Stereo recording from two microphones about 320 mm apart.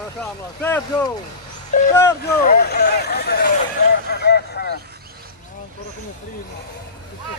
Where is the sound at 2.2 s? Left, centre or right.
Left.